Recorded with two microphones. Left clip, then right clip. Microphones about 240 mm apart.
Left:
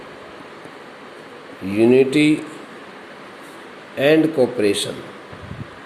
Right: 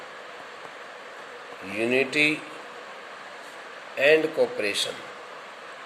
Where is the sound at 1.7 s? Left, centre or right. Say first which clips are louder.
Left 10 dB; centre.